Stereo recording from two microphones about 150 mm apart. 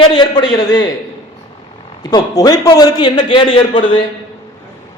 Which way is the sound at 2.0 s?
25° left (ahead or behind).